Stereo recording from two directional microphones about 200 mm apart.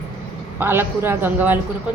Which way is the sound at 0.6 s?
10° right (ahead or behind).